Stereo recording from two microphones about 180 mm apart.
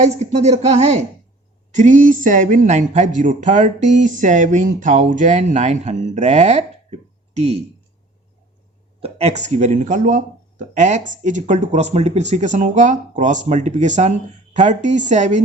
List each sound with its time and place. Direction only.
0.0 s a man's voice: 40° right (ahead or behind)
9.0 s a man's voice: 35° right (ahead or behind)